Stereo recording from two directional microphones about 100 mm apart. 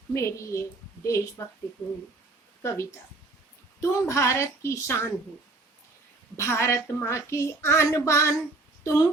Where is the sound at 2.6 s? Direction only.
30° left (ahead or behind).